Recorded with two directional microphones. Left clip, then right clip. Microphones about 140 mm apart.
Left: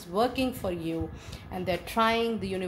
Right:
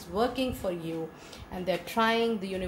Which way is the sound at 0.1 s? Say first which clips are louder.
Left 2 dB; 50° left (ahead or behind).